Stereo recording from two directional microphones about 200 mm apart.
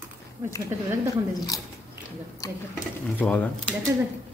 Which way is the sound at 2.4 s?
15° left (ahead or behind).